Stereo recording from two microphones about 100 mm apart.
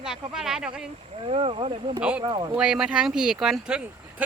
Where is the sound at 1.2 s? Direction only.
70° right (ahead or behind).